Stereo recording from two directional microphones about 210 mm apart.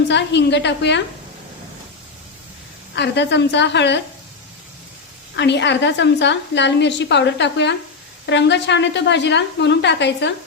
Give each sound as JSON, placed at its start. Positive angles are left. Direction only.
{"t": 0.1, "sound": "a woman's voice", "side_deg": 55}
{"t": 2.9, "sound": "a woman's voice", "side_deg": 55}
{"t": 5.4, "sound": "a woman's voice", "side_deg": 55}